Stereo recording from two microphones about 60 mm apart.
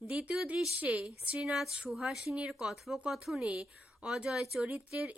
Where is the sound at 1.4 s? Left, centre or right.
Centre.